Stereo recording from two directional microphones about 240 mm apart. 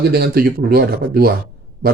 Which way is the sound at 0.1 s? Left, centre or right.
Right.